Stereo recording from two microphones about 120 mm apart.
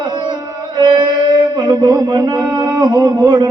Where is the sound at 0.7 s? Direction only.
40° right (ahead or behind).